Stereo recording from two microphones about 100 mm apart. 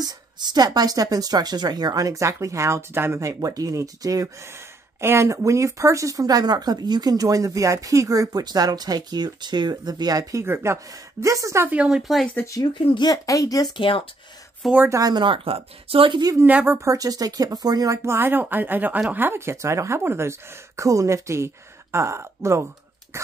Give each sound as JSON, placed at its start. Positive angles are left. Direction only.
{"t": 0.0, "sound": "speech", "side_deg": -45}
{"t": 3.2, "sound": "speech", "side_deg": -35}
{"t": 10.4, "sound": "speech", "side_deg": -25}
{"t": 11.7, "sound": "speech", "side_deg": -10}
{"t": 12.4, "sound": "speech", "side_deg": 35}
{"t": 12.7, "sound": "speech", "side_deg": 55}
{"t": 13.1, "sound": "speech", "side_deg": 35}
{"t": 13.7, "sound": "speech", "side_deg": 60}
{"t": 14.9, "sound": "speech", "side_deg": -35}
{"t": 15.2, "sound": "speech", "side_deg": -65}
{"t": 16.3, "sound": "speech", "side_deg": -20}
{"t": 16.8, "sound": "speech", "side_deg": -35}